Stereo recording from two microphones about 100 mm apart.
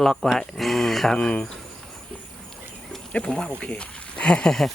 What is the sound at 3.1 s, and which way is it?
Speech, 10° left (ahead or behind).